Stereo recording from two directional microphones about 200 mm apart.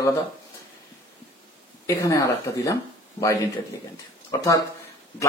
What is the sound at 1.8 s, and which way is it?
Speech, 15° left (ahead or behind).